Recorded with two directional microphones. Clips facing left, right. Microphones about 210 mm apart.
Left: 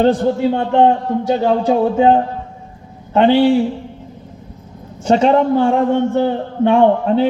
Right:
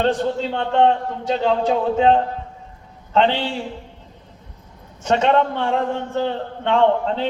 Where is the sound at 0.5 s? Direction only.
15° left (ahead or behind).